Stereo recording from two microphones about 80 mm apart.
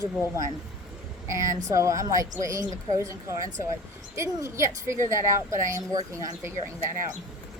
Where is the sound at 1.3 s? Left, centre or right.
Right.